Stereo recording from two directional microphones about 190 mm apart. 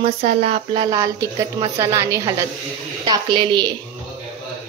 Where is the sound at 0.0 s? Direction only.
30° right (ahead or behind).